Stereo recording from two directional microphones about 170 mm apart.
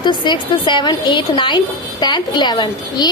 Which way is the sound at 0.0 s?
25° left (ahead or behind).